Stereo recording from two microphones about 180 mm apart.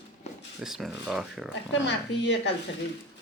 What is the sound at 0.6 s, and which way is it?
Speech, 5° right (ahead or behind).